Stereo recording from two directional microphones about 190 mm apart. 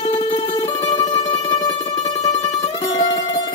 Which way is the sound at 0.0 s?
30° left (ahead or behind).